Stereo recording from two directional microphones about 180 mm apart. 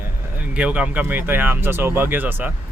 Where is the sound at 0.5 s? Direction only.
5° right (ahead or behind).